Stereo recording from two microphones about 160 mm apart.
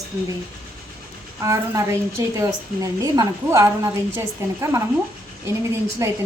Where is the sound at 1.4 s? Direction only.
20° right (ahead or behind).